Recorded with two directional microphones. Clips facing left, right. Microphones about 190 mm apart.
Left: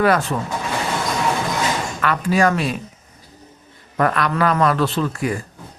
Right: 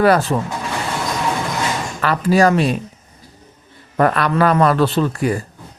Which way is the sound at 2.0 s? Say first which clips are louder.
Right 4 dB; 35° right (ahead or behind).